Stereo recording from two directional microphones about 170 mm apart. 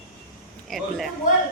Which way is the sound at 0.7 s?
Centre (ahead or behind).